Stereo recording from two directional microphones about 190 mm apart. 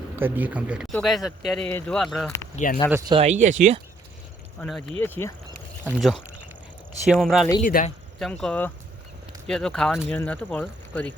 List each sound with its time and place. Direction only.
0.2 s speech: 10° right (ahead or behind)
2.6 s speech: 35° left (ahead or behind)
3.1 s speech: 35° right (ahead or behind)
4.6 s speech: 5° left (ahead or behind)
5.9 s speech: centre (ahead or behind)
7.6 s speech: 45° left (ahead or behind)
8.2 s speech: 5° left (ahead or behind)